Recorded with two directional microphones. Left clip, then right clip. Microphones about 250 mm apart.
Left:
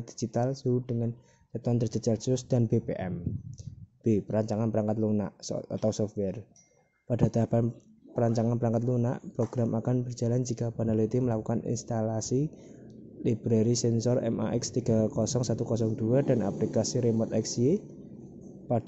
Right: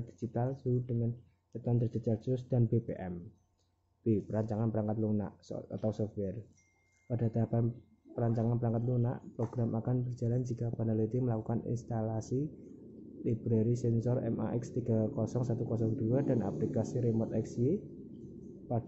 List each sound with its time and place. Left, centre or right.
0.3 s speech: left